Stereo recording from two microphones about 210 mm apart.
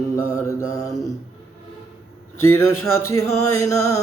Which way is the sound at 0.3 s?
15° left (ahead or behind).